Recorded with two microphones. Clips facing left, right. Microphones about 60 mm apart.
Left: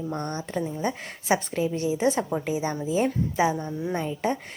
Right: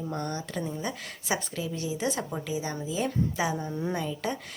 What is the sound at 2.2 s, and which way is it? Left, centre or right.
Speech, centre.